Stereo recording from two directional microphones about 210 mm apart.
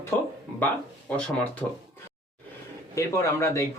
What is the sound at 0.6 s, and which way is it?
Speech, 5° left (ahead or behind).